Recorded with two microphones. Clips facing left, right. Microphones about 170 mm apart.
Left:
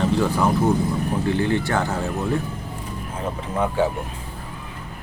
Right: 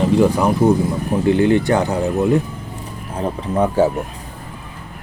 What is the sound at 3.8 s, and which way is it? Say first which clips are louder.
Speech: right 6 dB; 40° right (ahead or behind).